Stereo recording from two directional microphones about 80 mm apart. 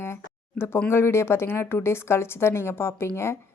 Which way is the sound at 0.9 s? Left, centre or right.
Left.